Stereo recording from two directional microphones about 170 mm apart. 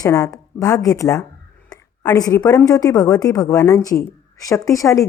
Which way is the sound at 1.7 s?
20° left (ahead or behind).